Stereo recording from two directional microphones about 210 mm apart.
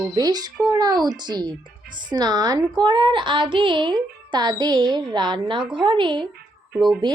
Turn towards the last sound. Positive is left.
turn(degrees=0)  # may be behind; listen again after turning